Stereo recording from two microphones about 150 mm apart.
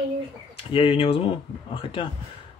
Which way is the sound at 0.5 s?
40° left (ahead or behind).